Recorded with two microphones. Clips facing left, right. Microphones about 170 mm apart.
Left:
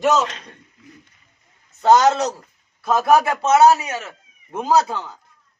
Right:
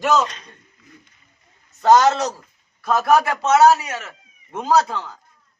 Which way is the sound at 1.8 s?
10° left (ahead or behind).